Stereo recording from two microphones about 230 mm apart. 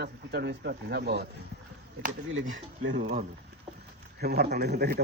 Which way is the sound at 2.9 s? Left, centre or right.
Right.